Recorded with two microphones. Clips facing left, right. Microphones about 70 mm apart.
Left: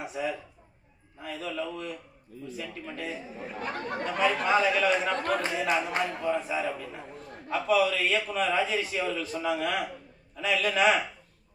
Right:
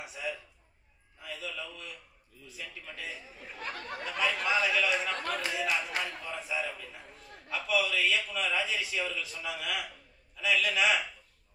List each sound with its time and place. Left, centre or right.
0.0 s a man's voice: left